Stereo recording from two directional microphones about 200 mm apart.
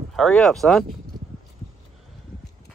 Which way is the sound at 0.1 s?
Centre (ahead or behind).